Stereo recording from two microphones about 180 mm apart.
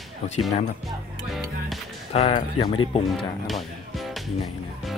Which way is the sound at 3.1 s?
Centre (ahead or behind).